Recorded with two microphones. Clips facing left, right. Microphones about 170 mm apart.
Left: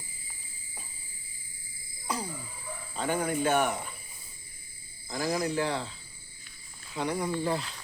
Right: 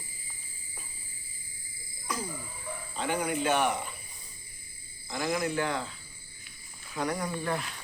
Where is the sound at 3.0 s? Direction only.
45° left (ahead or behind).